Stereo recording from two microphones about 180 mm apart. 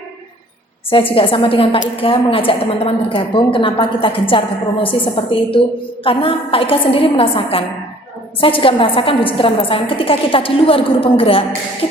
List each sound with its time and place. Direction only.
1.1 s a woman's voice: 30° left (ahead or behind)